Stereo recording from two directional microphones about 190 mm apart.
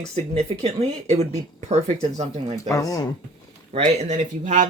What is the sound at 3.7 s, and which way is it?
Speech, 40° right (ahead or behind).